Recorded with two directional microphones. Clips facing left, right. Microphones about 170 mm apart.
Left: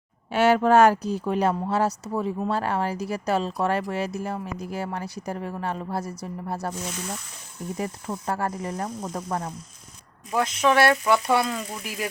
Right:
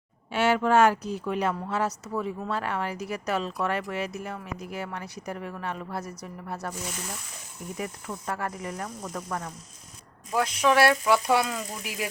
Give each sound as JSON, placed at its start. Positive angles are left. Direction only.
{"t": 0.3, "sound": "speech", "side_deg": 40}
{"t": 7.8, "sound": "speech", "side_deg": 35}
{"t": 10.3, "sound": "speech", "side_deg": -10}